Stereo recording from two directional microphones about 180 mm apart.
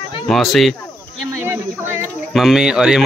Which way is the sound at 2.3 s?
Centre (ahead or behind).